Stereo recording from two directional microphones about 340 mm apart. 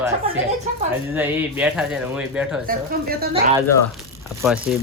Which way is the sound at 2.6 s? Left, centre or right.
Right.